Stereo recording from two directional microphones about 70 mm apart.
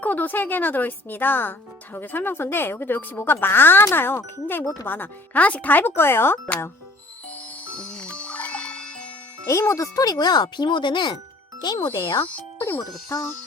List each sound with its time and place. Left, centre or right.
0.0 s speech: left
4.6 s speech: left
4.9 s speech: left
7.8 s music: centre
9.5 s a child's voice: left
12.2 s speech: left
13.1 s speech: left